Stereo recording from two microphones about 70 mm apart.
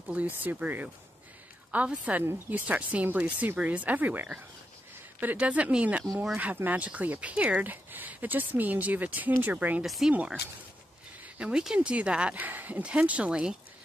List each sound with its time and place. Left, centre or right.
0.1 s speech: right
9.8 s speech: centre
11.3 s speech: centre